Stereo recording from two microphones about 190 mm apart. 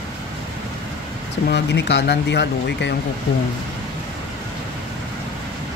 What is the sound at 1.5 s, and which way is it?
Speech, 65° left (ahead or behind).